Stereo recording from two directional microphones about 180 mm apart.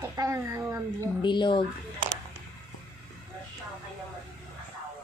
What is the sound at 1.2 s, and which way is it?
Speech, 25° left (ahead or behind).